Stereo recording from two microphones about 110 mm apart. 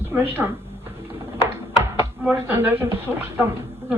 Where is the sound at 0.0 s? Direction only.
20° right (ahead or behind).